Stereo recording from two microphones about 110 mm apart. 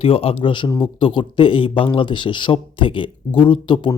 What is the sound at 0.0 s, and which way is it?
Speech, 60° left (ahead or behind).